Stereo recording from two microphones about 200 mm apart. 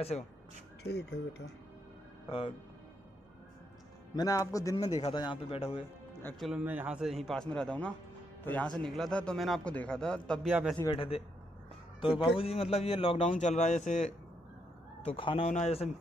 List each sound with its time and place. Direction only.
0.8 s speech: 55° left (ahead or behind)
2.2 s speech: 25° left (ahead or behind)
4.1 s speech: 15° left (ahead or behind)
4.8 s a man's voice: 30° left (ahead or behind)
6.4 s a man's voice: 10° right (ahead or behind)
11.0 s speech: 30° left (ahead or behind)
12.1 s a man's voice: 5° right (ahead or behind)
12.4 s a man's voice: 30° left (ahead or behind)